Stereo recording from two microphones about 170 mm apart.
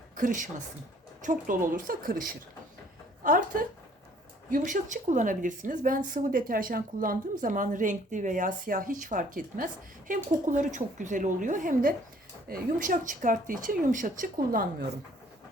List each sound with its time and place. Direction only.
0.2 s a woman's voice: 50° right (ahead or behind)